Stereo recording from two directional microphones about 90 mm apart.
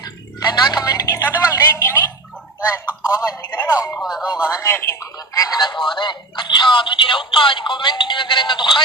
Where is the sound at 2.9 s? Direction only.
15° right (ahead or behind).